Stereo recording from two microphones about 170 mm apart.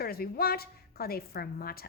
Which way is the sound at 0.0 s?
65° left (ahead or behind).